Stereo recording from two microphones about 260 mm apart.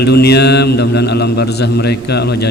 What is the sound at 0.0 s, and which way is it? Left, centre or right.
Speech, left.